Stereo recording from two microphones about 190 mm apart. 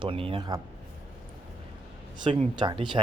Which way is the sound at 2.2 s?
25° right (ahead or behind).